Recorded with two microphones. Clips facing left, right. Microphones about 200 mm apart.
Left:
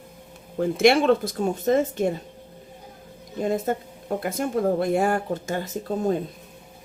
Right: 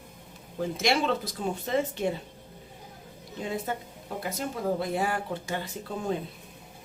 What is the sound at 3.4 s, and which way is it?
Speech, 45° left (ahead or behind).